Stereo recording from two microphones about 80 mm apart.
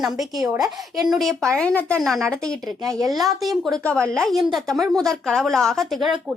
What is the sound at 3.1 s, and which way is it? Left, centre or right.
Speech, centre.